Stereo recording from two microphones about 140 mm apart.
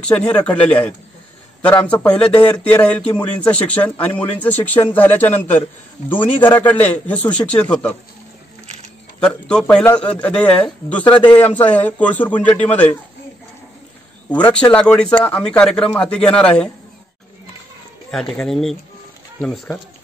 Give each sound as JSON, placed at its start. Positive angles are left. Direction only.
{"t": 0.0, "sound": "a man's voice", "side_deg": 10}
{"t": 9.2, "sound": "a man's voice", "side_deg": 5}
{"t": 11.1, "sound": "a man's voice", "side_deg": 35}
{"t": 11.3, "sound": "a man's voice", "side_deg": 10}
{"t": 14.4, "sound": "a man's voice", "side_deg": 10}
{"t": 18.3, "sound": "a man's voice", "side_deg": 5}